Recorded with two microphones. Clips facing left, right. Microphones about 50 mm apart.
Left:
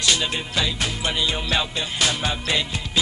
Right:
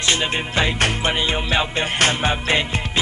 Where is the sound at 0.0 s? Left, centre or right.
Right.